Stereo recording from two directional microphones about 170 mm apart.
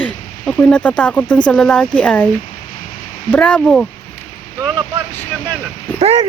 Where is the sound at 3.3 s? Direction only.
5° left (ahead or behind).